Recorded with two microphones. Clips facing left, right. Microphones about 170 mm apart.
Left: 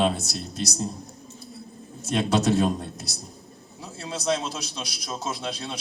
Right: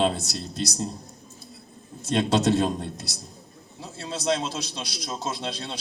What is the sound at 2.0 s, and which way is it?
A man's voice, 25° right (ahead or behind).